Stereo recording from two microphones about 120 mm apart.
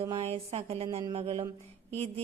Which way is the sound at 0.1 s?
55° right (ahead or behind).